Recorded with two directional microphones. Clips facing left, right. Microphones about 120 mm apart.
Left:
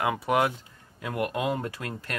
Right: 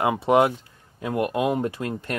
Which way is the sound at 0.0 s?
25° right (ahead or behind).